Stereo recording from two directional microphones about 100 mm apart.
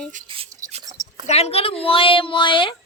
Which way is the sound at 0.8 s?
40° right (ahead or behind).